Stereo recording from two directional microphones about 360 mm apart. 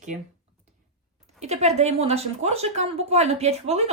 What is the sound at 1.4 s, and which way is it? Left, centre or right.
A woman's voice, centre.